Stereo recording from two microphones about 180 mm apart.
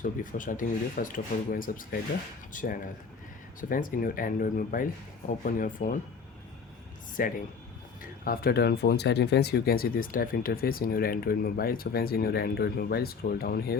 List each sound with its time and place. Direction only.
0.0 s speech: 50° left (ahead or behind)
7.2 s speech: 50° left (ahead or behind)